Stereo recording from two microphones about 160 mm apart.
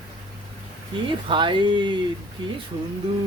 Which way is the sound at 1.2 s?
30° right (ahead or behind).